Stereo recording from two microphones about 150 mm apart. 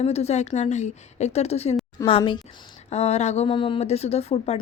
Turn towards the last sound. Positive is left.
turn(degrees=45)  # may be behind; listen again after turning